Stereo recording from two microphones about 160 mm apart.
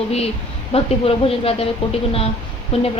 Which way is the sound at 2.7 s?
35° left (ahead or behind).